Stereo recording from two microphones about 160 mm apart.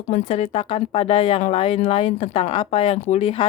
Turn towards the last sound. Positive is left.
turn(degrees=40)  # may be behind; listen again after turning